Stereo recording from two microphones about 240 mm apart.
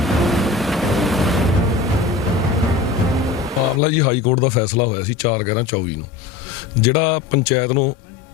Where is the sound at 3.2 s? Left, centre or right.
Centre.